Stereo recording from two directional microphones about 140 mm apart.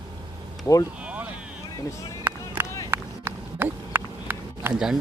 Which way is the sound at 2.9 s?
15° right (ahead or behind).